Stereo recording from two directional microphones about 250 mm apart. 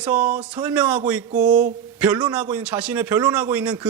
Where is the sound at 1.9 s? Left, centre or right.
Centre.